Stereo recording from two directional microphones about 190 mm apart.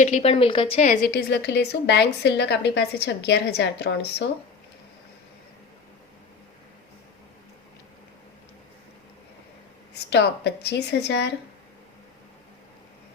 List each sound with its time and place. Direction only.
0.0 s a woman's voice: 35° left (ahead or behind)
0.8 s a woman's voice: 50° left (ahead or behind); by 4.3 s 65° left (ahead or behind)
9.9 s a woman's voice: 65° left (ahead or behind)